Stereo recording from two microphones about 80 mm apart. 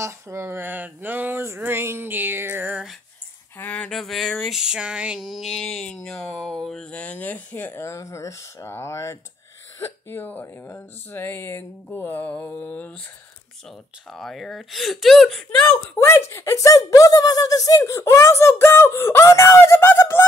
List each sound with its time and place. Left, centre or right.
0.0 s speech: right
3.5 s speech: left
3.9 s a sound: centre
5.3 s speech: centre; by 7.7 s left
7.7 s speech: left
14.1 s a sound: centre
16.1 s speech: left
16.7 s speech: left